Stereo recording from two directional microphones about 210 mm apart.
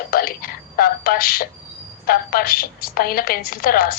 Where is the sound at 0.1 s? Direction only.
45° left (ahead or behind).